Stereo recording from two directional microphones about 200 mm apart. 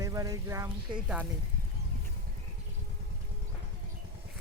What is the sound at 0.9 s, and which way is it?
Speech, 5° right (ahead or behind).